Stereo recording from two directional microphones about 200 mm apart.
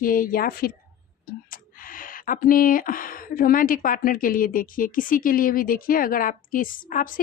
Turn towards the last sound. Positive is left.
turn(degrees=40)  # may be behind; listen again after turning